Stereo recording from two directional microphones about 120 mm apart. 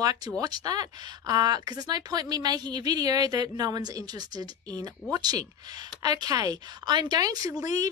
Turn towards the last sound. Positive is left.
turn(degrees=-30)  # may be behind; listen again after turning